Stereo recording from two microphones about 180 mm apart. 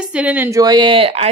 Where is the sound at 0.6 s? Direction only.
25° right (ahead or behind).